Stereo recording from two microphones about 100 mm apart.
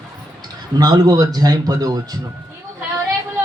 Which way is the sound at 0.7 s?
45° right (ahead or behind).